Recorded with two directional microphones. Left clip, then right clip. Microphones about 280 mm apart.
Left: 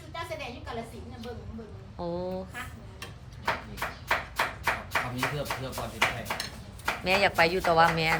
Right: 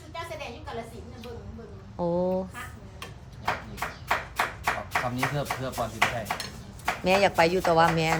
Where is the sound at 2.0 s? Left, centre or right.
Centre.